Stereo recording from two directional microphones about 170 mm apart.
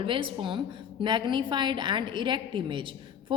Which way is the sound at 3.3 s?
30° right (ahead or behind).